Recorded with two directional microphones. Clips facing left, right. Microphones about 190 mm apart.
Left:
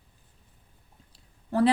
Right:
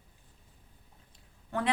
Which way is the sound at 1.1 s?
35° left (ahead or behind).